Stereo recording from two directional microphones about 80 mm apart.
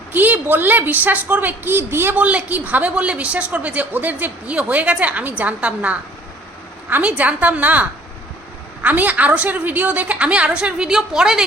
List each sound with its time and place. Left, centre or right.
0.1 s a woman's voice: right
2.1 s a woman's voice: centre